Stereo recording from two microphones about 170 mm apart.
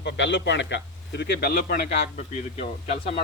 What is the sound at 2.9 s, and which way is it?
Speech, 40° left (ahead or behind).